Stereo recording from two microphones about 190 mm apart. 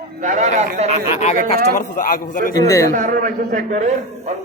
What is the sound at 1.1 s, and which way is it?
A man's voice, 35° left (ahead or behind).